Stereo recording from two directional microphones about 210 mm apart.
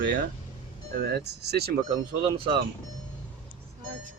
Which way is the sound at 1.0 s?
50° right (ahead or behind).